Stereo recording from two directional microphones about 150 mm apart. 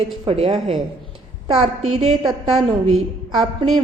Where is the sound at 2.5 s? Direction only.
Centre (ahead or behind).